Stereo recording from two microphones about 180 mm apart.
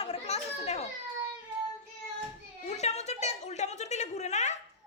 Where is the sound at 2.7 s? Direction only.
40° left (ahead or behind).